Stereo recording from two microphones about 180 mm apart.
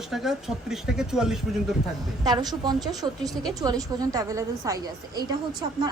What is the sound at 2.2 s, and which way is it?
A woman's voice, 20° right (ahead or behind).